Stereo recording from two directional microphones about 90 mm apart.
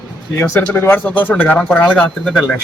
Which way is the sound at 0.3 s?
25° left (ahead or behind).